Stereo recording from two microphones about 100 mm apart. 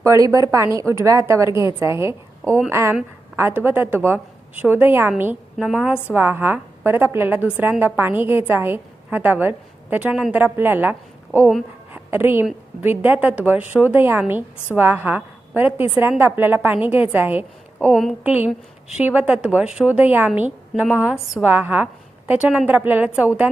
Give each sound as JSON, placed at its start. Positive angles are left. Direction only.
{"t": 0.0, "sound": "a woman's voice", "side_deg": -30}
{"t": 21.4, "sound": "a woman's voice", "side_deg": -20}